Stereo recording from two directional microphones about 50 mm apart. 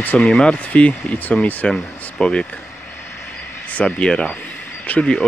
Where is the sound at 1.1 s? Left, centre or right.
Left.